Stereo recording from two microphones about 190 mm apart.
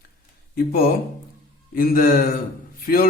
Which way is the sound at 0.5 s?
50° left (ahead or behind).